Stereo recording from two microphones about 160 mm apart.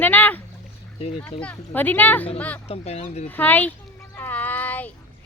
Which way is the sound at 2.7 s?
40° left (ahead or behind).